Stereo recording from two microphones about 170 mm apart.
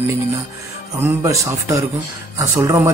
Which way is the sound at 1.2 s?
15° right (ahead or behind).